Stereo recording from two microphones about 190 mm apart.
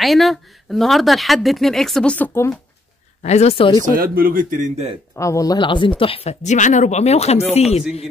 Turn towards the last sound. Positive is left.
turn(degrees=35)  # may be behind; listen again after turning